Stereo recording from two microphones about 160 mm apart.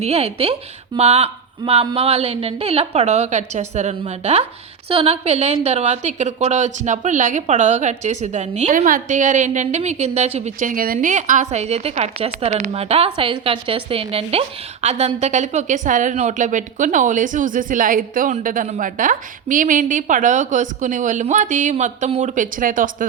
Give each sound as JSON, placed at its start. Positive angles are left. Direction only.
{"t": 0.0, "sound": "a woman's voice", "side_deg": -40}